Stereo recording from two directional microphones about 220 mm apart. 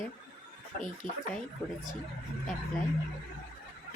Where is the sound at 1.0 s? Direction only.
25° right (ahead or behind).